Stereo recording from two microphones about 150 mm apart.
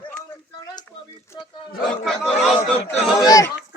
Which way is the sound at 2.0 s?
Centre (ahead or behind).